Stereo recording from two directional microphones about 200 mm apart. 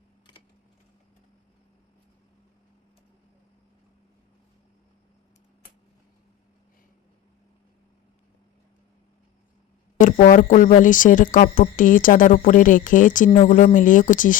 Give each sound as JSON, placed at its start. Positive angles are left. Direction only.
{"t": 10.0, "sound": "speech", "side_deg": 40}